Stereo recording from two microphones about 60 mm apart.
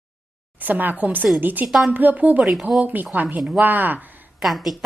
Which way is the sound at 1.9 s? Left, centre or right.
Right.